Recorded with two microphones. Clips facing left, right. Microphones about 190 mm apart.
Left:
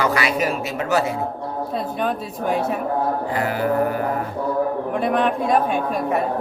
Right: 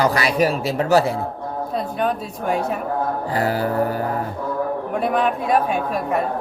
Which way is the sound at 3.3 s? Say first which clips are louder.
Right 2 dB; 35° right (ahead or behind).